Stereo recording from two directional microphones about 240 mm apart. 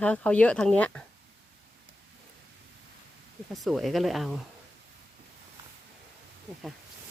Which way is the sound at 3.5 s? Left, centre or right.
Centre.